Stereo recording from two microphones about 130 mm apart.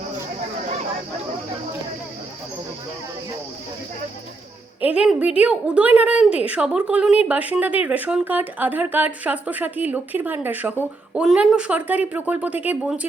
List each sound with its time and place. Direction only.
4.8 s a woman's voice: 10° right (ahead or behind)